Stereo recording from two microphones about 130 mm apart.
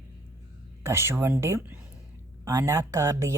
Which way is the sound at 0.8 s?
20° right (ahead or behind).